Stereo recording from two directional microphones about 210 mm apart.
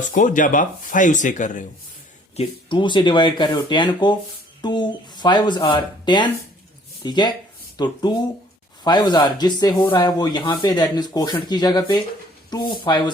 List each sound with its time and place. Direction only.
0.1 s speech: 40° left (ahead or behind)
2.3 s speech: 25° left (ahead or behind)